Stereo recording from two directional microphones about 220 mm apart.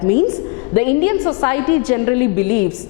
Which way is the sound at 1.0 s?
20° left (ahead or behind).